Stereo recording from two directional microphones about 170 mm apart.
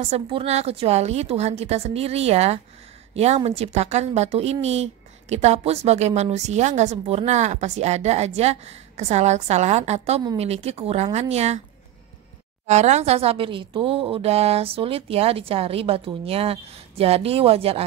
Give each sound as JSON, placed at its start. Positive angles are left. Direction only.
{"t": 0.0, "sound": "speech", "side_deg": -35}
{"t": 12.6, "sound": "speech", "side_deg": -40}